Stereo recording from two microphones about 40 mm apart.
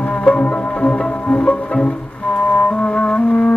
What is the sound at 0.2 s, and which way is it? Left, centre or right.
Music, left.